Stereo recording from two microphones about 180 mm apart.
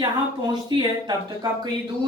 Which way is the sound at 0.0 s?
25° right (ahead or behind).